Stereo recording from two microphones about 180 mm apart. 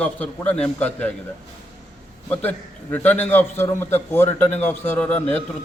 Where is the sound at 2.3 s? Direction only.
10° left (ahead or behind).